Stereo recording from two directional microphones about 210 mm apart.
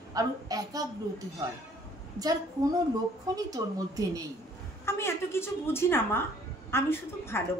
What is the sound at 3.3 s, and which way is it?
Speech, 15° right (ahead or behind).